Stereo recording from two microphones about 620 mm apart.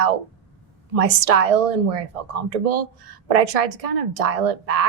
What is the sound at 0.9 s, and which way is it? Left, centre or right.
Speech, right.